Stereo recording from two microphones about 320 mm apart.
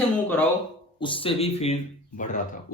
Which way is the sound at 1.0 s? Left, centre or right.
Centre.